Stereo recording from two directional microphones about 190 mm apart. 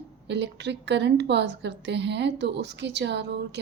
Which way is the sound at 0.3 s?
65° right (ahead or behind).